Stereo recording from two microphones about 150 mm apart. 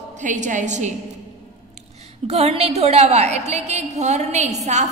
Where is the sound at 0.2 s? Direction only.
55° right (ahead or behind).